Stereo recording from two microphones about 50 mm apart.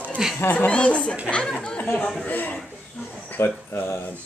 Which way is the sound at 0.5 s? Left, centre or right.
Left.